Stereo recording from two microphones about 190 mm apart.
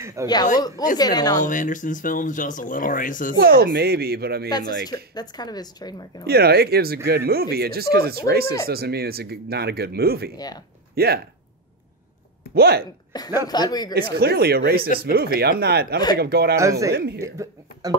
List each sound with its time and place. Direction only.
0.0 s a sound: 15° right (ahead or behind)
0.6 s a woman's voice: 20° left (ahead or behind)
1.4 s speech: 45° left (ahead or behind)
3.3 s speech: 55° right (ahead or behind)
5.1 s a woman's voice: 20° left (ahead or behind)
6.2 s speech: 55° right (ahead or behind)
10.3 s a woman's voice: 20° left (ahead or behind)
11.0 s speech: 55° right (ahead or behind)
12.5 s speech: 55° right (ahead or behind)
13.1 s a woman's voice: 20° left (ahead or behind)
14.1 s speech: 55° right (ahead or behind)
17.2 s speech: 15° right (ahead or behind)